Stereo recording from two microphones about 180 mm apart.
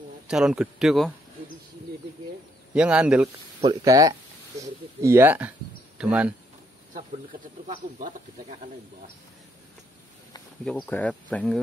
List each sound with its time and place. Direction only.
0.3 s speech: 5° right (ahead or behind)
2.7 s speech: 5° right (ahead or behind)
3.6 s speech: 20° right (ahead or behind)
7.6 s speech: 45° right (ahead or behind)
10.6 s speech: 5° left (ahead or behind)